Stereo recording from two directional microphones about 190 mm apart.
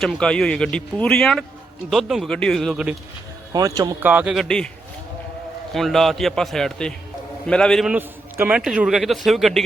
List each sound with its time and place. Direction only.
0.0 s a man's voice: 5° left (ahead or behind)
3.5 s speech: 20° right (ahead or behind)
4.1 s a man's voice: 5° right (ahead or behind)
5.7 s a man's voice: centre (ahead or behind)